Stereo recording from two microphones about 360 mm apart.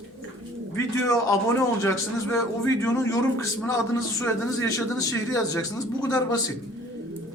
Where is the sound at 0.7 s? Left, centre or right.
Centre.